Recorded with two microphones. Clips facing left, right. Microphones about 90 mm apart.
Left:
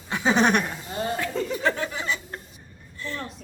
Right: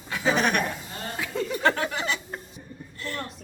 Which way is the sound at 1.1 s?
Centre (ahead or behind).